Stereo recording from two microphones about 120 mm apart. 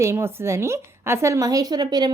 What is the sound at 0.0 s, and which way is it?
A woman's voice, 25° right (ahead or behind).